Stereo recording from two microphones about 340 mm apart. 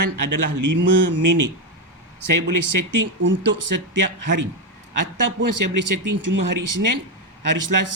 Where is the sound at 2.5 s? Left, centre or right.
Right.